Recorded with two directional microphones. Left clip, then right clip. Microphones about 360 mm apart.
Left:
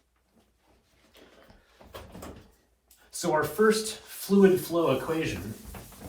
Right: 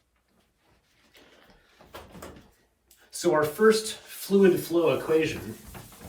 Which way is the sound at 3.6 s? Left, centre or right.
Centre.